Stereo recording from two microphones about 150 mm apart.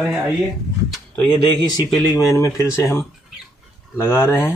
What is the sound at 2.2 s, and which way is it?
A man's voice, 20° left (ahead or behind).